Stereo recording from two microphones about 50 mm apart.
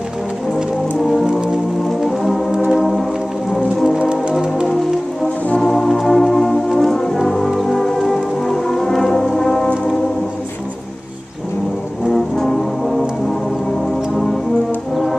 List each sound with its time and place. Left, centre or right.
2.0 s music: centre
2.5 s music: centre
2.8 s music: centre
3.9 s music: centre
5.6 s brass instrument: centre
5.9 s music: centre
12.1 s music: centre
14.1 s music: centre